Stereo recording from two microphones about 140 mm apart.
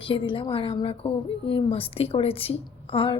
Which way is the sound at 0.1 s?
35° left (ahead or behind).